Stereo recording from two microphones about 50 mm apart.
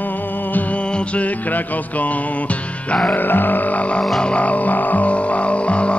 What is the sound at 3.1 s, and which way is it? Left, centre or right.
Music, left.